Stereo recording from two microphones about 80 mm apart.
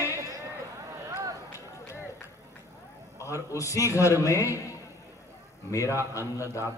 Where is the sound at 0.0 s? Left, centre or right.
Right.